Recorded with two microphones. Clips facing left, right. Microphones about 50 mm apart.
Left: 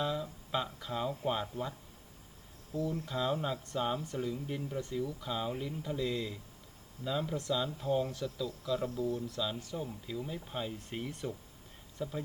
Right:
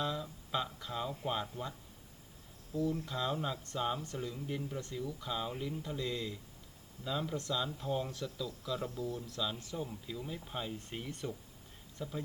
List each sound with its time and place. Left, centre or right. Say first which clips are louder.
0.0 s a sound: left 2 dB; centre
1.2 s speech: left 3 dB; centre
2.7 s speech: right 1 dB; left
3.1 s speech: left 3 dB; centre
9.0 s speech: left 5 dB; left
9.3 s speech: left 2 dB; centre